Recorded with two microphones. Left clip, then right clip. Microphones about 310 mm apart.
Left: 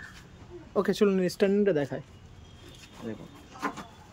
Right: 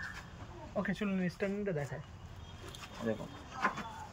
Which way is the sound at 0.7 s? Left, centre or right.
Centre.